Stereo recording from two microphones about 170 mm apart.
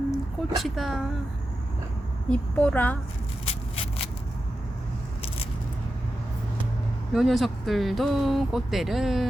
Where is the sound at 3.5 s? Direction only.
35° left (ahead or behind).